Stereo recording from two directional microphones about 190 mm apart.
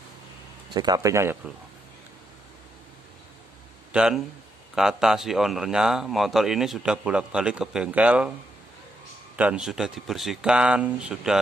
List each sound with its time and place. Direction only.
0.7 s speech: 20° right (ahead or behind)
3.9 s a man's voice: 5° right (ahead or behind)
9.4 s a man's voice: 5° right (ahead or behind)